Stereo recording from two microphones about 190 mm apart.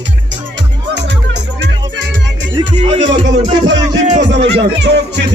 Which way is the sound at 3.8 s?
20° right (ahead or behind).